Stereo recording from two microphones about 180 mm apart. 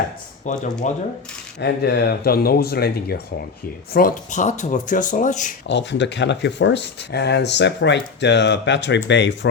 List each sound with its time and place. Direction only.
0.4 s speech: 40° left (ahead or behind)
1.6 s speech: 65° left (ahead or behind)
3.9 s speech: 50° left (ahead or behind)
5.6 s speech: 75° left (ahead or behind)